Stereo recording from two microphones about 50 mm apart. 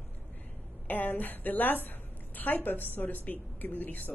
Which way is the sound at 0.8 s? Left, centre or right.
Left.